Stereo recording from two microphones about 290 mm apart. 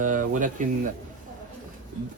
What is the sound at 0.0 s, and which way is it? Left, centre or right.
Speech, right.